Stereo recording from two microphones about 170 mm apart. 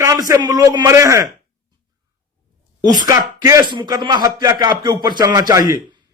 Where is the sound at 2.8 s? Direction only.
25° right (ahead or behind).